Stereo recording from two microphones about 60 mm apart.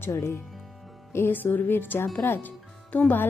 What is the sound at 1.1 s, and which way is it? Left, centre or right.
Speech, left.